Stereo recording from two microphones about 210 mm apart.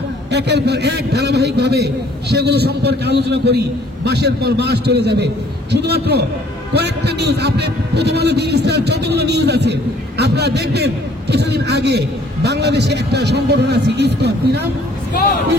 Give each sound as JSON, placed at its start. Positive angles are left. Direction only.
{"t": 0.3, "sound": "a man's voice", "side_deg": -55}